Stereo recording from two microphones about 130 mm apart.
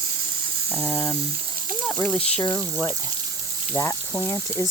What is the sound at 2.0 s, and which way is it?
Speech, 5° left (ahead or behind).